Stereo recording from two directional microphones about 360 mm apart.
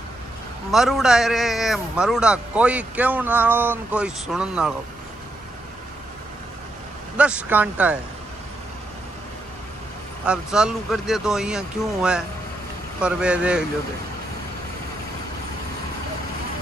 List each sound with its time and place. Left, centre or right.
0.7 s a man's voice: centre
7.2 s a man's voice: centre
10.2 s a man's voice: centre